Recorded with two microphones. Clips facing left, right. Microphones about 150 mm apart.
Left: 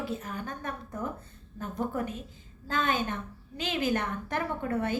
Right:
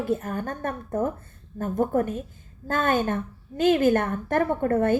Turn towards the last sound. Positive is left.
turn(degrees=-50)  # may be behind; listen again after turning